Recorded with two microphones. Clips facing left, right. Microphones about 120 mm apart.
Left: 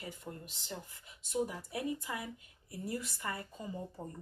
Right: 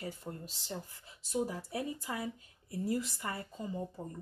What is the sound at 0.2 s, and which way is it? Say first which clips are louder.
Speech: right 2 dB; 35° right (ahead or behind).